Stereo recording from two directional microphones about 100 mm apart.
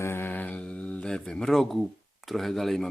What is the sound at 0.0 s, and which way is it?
Speech, 25° left (ahead or behind).